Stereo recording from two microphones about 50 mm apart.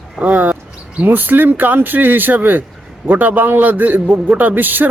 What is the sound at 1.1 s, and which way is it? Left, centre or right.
A man's voice, right.